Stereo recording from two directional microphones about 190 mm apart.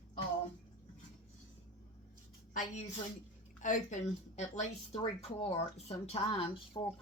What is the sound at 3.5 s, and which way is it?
A woman's voice, 40° left (ahead or behind).